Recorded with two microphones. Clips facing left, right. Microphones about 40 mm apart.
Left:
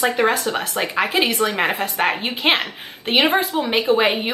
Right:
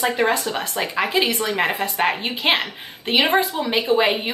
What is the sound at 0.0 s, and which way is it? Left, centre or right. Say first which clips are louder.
Speech: left 2 dB; centre.